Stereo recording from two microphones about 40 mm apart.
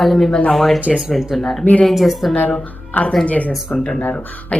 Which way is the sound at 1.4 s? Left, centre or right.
Centre.